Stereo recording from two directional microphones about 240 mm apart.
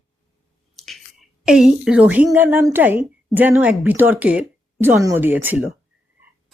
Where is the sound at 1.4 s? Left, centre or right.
Centre.